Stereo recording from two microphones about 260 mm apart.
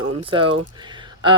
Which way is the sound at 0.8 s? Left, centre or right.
Centre.